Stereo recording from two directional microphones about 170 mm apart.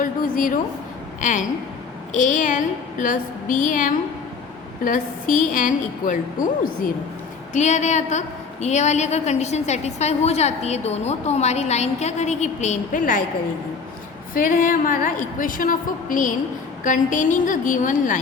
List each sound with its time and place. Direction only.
0.0 s a sound: 55° left (ahead or behind)
1.2 s a woman's voice: 45° left (ahead or behind)
7.5 s a woman's voice: 45° left (ahead or behind)
14.3 s a woman's voice: 50° left (ahead or behind)